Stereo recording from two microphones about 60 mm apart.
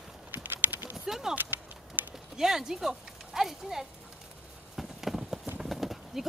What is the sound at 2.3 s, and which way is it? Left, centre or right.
Speech, centre.